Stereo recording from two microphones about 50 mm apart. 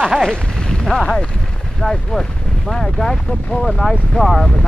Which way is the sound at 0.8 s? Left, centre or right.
Centre.